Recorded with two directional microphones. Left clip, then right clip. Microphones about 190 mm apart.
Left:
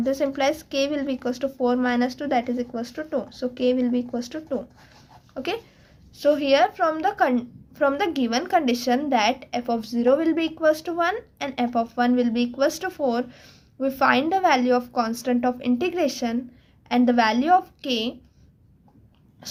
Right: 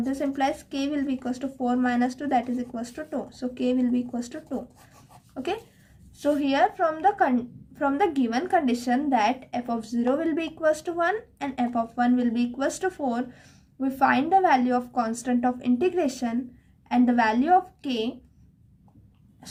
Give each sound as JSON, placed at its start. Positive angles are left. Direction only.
{"t": 0.0, "sound": "a woman's voice", "side_deg": 30}